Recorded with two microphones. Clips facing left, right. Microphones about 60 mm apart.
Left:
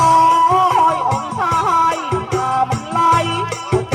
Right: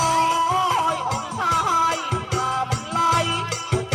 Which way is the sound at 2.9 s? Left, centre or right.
Left.